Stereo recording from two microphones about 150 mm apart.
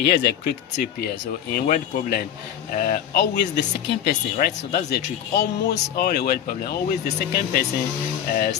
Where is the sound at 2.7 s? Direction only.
65° left (ahead or behind); by 3.3 s 80° left.